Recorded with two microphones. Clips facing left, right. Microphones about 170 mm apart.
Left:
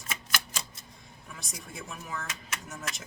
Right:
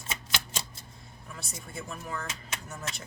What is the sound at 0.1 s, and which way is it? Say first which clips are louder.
Typewriter: even; 25° right (ahead or behind).